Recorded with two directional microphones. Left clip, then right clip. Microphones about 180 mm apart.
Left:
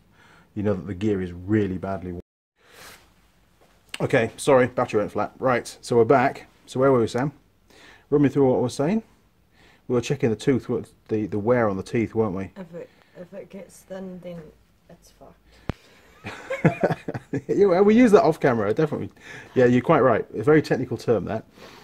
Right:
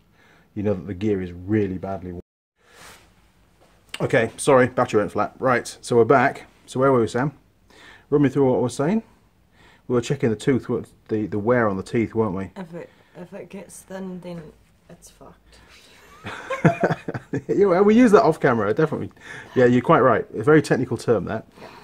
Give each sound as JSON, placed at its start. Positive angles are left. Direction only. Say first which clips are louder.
{"t": 0.3, "sound": "speech", "louder": "right 1 dB", "side_deg": -10}
{"t": 3.9, "sound": "speech", "louder": "right 1 dB", "side_deg": 20}
{"t": 4.4, "sound": "speech", "louder": "right 2 dB", "side_deg": 0}
{"t": 13.3, "sound": "a woman's voice", "louder": "right 2 dB", "side_deg": -40}
{"t": 15.2, "sound": "speech", "louder": "right 2 dB", "side_deg": -25}
{"t": 16.3, "sound": "speech", "louder": "right 3 dB", "side_deg": 10}
{"t": 21.2, "sound": "speech", "louder": "right 1 dB", "side_deg": 10}